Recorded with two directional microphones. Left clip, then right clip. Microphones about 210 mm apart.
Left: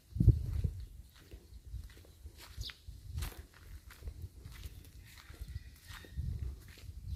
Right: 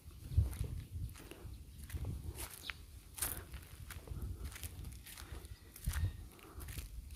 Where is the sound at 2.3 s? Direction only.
25° right (ahead or behind).